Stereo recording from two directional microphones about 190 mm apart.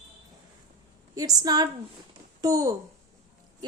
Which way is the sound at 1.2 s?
20° right (ahead or behind).